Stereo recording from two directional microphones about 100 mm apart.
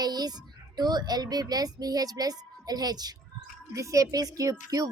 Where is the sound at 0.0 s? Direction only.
40° right (ahead or behind).